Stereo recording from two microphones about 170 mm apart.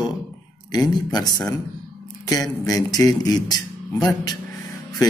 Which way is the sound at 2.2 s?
20° left (ahead or behind).